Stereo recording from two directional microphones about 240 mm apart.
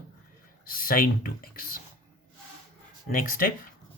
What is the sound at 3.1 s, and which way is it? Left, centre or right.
Speech, left.